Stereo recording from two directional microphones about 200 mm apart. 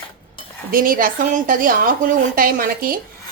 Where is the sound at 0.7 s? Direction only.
45° right (ahead or behind).